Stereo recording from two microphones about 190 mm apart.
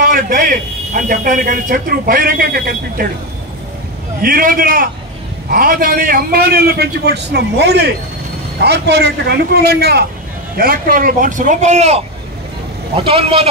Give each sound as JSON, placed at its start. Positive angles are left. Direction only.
{"t": 0.0, "sound": "speech", "side_deg": -50}
{"t": 4.2, "sound": "speech", "side_deg": -50}
{"t": 13.0, "sound": "speech", "side_deg": -30}